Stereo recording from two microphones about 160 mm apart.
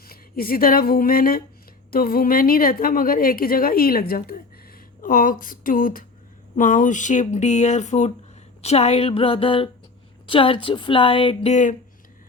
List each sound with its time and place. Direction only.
0.0 s a woman's voice: 70° left (ahead or behind); by 11.8 s 50° left (ahead or behind)